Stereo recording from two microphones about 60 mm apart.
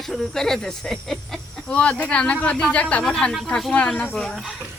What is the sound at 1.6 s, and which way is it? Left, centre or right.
Speech, centre.